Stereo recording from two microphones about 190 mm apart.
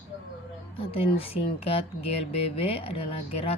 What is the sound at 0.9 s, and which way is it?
Speech, 30° left (ahead or behind).